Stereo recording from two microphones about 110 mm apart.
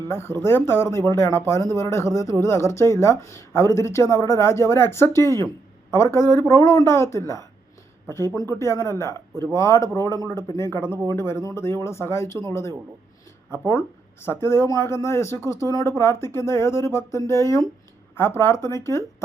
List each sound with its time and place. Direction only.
0.1 s speech: 20° left (ahead or behind)
13.5 s speech: 25° left (ahead or behind)